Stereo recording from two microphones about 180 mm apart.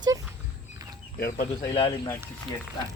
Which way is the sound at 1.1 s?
55° left (ahead or behind).